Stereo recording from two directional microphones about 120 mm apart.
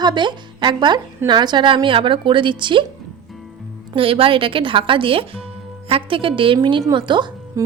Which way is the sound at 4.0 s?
50° right (ahead or behind).